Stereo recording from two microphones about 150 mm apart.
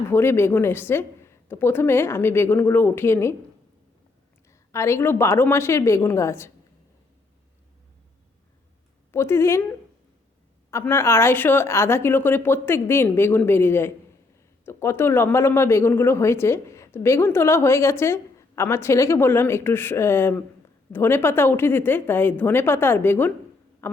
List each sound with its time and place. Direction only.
0.1 s speech: 15° left (ahead or behind)
4.7 s a woman's voice: 20° left (ahead or behind)
9.1 s speech: 15° left (ahead or behind)
23.8 s a sound: 15° left (ahead or behind)